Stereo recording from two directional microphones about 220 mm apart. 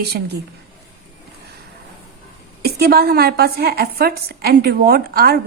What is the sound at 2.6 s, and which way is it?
A woman's voice, 45° right (ahead or behind).